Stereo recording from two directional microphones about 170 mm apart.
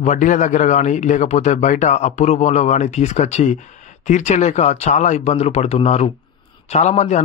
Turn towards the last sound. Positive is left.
turn(degrees=45)  # may be behind; listen again after turning